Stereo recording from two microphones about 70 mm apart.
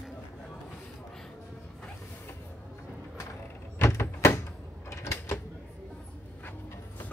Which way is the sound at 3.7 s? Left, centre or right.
Left.